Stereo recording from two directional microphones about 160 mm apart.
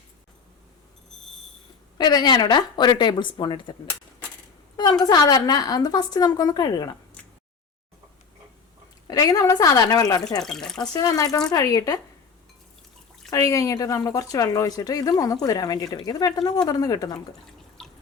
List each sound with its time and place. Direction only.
2.0 s a woman's voice: 25° left (ahead or behind)
4.8 s a woman's voice: 25° left (ahead or behind)
9.0 s a woman's voice: 20° left (ahead or behind)
10.4 s speech: 5° left (ahead or behind)
10.9 s a woman's voice: 25° left (ahead or behind)
13.3 s a woman's voice: 20° left (ahead or behind)
17.8 s drip: 5° left (ahead or behind)